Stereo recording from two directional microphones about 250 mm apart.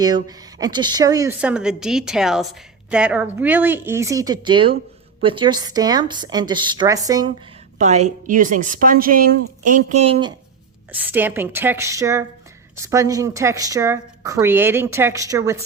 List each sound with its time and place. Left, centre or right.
0.0 s a woman's voice: centre
7.8 s a woman's voice: right
11.1 s a woman's voice: centre